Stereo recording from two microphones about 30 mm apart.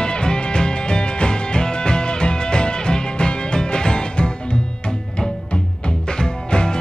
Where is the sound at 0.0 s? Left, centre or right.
Left.